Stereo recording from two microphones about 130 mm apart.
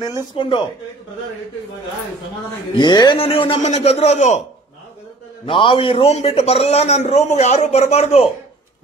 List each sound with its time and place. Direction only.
0.4 s speech: 40° left (ahead or behind)
2.7 s a man's voice: 35° left (ahead or behind); by 4.4 s 60° left (ahead or behind)
5.4 s a man's voice: 40° left (ahead or behind)